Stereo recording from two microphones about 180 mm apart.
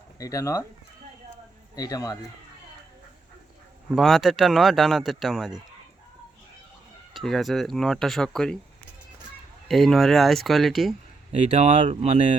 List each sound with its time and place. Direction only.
0.2 s speech: 20° left (ahead or behind)
1.7 s a man's voice: 20° left (ahead or behind)
3.9 s speech: centre (ahead or behind)
7.1 s speech: centre (ahead or behind)
9.6 s speech: centre (ahead or behind)
11.3 s speech: 35° right (ahead or behind)